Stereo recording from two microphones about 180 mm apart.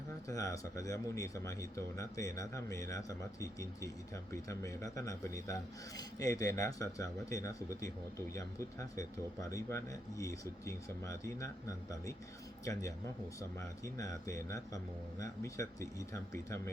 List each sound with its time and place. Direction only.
0.3 s speech: 20° left (ahead or behind)
13.8 s speech: 20° left (ahead or behind)